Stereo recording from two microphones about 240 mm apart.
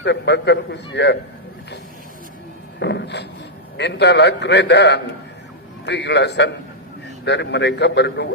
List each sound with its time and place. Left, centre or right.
0.0 s a man's voice: left
2.7 s a sound: left
3.8 s a man's voice: left